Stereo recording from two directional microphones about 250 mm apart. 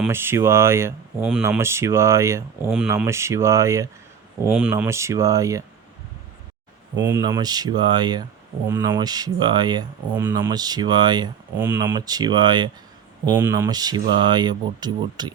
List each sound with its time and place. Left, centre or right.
0.0 s speech: centre
7.1 s speech: centre